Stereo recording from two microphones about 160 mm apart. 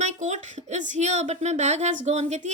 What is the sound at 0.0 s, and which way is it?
A woman's voice, 50° right (ahead or behind).